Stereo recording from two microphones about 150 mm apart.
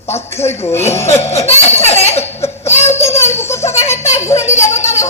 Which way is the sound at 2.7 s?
50° left (ahead or behind).